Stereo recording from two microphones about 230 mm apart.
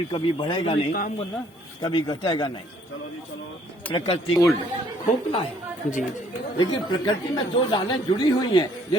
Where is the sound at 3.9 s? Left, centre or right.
Left.